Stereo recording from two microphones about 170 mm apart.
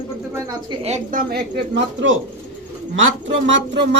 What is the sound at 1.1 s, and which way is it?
Speech, 60° right (ahead or behind).